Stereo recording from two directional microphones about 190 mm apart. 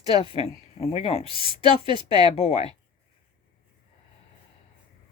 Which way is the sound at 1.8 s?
25° right (ahead or behind).